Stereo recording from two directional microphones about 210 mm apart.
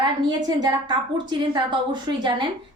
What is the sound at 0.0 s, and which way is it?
A woman's voice, 20° right (ahead or behind).